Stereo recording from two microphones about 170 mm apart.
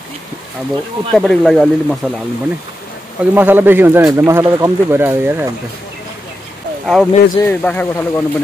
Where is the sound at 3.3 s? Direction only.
10° right (ahead or behind).